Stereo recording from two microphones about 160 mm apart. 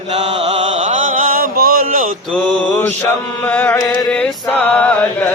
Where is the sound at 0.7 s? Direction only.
50° right (ahead or behind).